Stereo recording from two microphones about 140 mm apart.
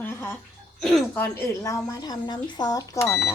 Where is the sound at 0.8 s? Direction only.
Centre (ahead or behind).